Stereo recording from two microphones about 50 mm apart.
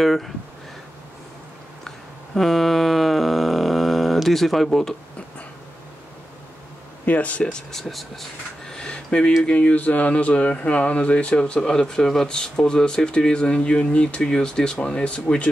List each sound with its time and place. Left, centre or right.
0.0 s speech: centre
1.9 s a sound: centre
7.1 s speech: left
7.4 s speech: centre